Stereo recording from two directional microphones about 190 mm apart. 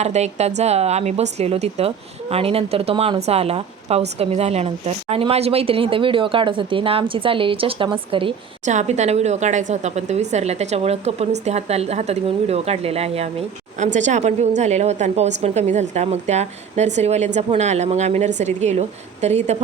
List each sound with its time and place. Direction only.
0.0 s speech: 35° right (ahead or behind)